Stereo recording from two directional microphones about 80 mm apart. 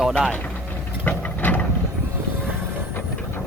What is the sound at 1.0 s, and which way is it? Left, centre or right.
Ratchet, left.